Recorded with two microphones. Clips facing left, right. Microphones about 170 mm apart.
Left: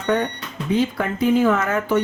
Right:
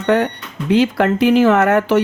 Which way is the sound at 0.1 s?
90° right.